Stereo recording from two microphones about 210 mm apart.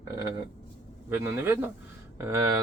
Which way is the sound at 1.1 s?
10° right (ahead or behind).